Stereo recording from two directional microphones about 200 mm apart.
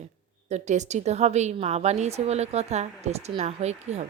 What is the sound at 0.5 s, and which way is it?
A woman's voice, 35° right (ahead or behind).